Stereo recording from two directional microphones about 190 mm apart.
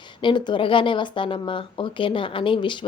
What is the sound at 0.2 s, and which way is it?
A woman's voice, 25° left (ahead or behind).